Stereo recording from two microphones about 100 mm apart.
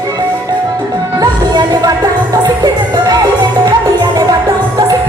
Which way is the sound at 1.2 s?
40° right (ahead or behind).